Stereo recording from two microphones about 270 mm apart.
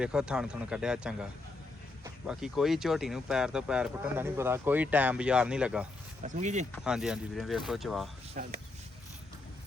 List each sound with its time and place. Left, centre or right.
0.0 s speech: centre
6.2 s speech: right
6.7 s speech: centre
8.4 s speech: right